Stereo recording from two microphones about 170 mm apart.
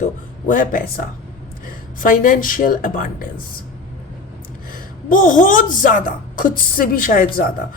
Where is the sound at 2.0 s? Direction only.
50° left (ahead or behind).